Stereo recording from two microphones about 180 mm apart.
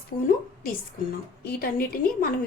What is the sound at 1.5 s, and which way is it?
Speech, 55° left (ahead or behind).